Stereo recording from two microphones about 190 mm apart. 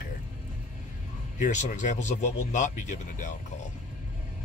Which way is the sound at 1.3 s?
40° left (ahead or behind).